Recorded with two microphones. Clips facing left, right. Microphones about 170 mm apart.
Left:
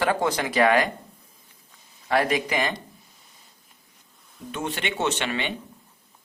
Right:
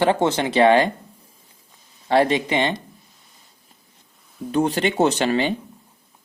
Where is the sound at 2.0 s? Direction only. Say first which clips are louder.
Right 5 dB; 30° right (ahead or behind).